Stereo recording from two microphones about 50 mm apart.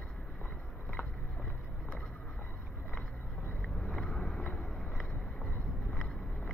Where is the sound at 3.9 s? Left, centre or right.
Centre.